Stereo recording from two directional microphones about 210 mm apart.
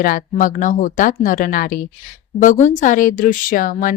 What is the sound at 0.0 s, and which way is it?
A woman's voice, 40° left (ahead or behind).